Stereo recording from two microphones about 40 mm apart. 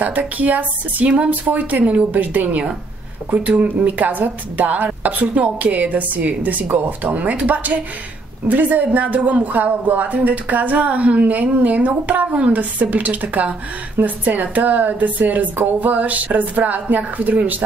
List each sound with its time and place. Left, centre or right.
0.0 s a woman's voice: right
12.4 s a woman's voice: right